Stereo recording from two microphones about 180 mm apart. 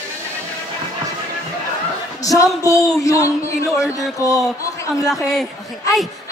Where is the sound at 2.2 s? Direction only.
20° left (ahead or behind).